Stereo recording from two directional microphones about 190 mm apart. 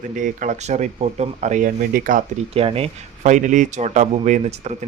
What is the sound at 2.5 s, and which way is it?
Speech, 30° right (ahead or behind).